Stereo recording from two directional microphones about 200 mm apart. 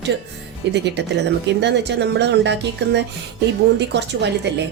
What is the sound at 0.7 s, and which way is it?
Speech, 60° right (ahead or behind).